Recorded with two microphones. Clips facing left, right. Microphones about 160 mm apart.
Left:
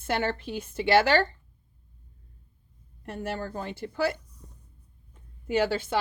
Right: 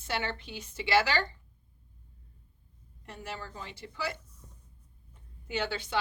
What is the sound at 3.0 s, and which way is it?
Speech, 55° left (ahead or behind).